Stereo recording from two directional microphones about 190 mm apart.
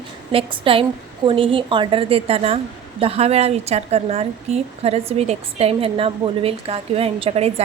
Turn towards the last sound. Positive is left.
turn(degrees=-30)  # may be behind; listen again after turning